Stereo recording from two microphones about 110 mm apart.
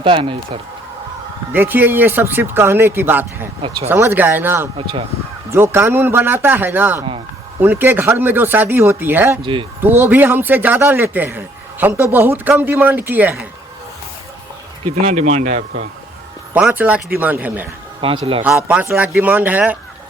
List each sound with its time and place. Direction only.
0.0 s speech: 50° right (ahead or behind)
1.5 s speech: 20° right (ahead or behind)
9.4 s speech: 50° right (ahead or behind)
9.8 s a man's voice: 20° right (ahead or behind)
15.1 s speech: 90° right
16.6 s a man's voice: 10° right (ahead or behind)
18.2 s a man's voice: 55° right (ahead or behind)
18.5 s a man's voice: 10° right (ahead or behind)